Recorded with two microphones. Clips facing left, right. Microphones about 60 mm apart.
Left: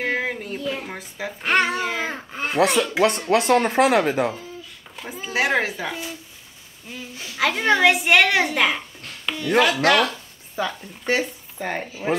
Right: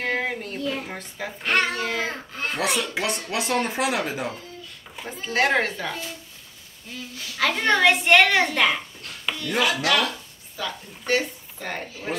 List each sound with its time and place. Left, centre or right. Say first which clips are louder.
0.0 s a child's voice: left 1 dB; centre
2.6 s a child's voice: left 7 dB; centre
3.3 s speech: left 7 dB; left
4.9 s a child's voice: even; centre
9.6 s speech: left 5 dB; left
10.6 s a child's voice: left 5 dB; left